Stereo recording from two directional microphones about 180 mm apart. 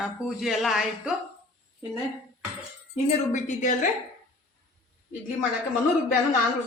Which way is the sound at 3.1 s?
40° left (ahead or behind).